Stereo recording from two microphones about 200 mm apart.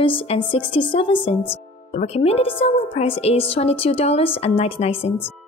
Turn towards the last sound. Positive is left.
turn(degrees=30)  # may be behind; listen again after turning